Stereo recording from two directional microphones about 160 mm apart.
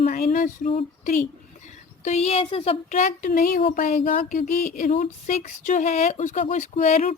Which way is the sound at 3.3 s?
65° left (ahead or behind).